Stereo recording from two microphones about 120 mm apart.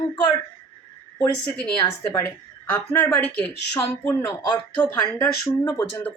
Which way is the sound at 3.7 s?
30° left (ahead or behind).